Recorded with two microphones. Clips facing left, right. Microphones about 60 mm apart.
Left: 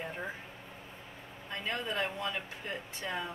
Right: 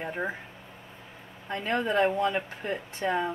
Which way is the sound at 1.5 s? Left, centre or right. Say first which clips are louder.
Right 9 dB; right.